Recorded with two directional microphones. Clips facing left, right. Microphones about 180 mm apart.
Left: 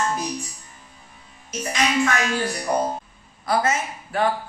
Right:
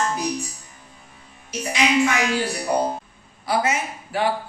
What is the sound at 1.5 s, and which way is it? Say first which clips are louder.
A woman's voice: right 2 dB; 10° right (ahead or behind).